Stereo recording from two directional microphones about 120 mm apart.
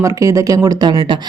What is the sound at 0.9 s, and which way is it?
Speech, 45° right (ahead or behind).